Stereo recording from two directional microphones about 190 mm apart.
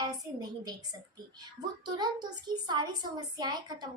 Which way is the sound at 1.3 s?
20° right (ahead or behind).